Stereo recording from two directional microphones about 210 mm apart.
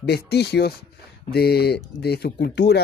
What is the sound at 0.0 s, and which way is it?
Speech, 50° left (ahead or behind).